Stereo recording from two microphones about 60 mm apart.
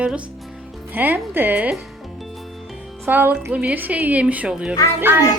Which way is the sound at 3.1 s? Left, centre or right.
Right.